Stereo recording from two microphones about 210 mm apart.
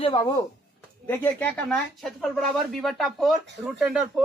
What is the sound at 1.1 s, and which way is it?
Speech, 10° left (ahead or behind).